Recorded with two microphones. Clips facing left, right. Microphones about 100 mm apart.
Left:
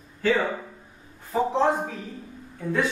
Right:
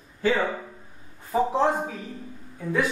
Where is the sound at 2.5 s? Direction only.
5° right (ahead or behind).